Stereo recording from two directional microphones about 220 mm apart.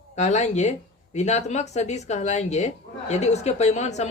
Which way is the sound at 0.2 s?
30° left (ahead or behind).